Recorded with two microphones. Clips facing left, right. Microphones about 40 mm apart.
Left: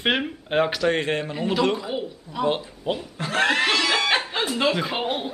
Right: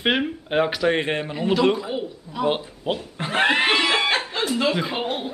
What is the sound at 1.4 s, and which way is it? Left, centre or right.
A man's voice, centre.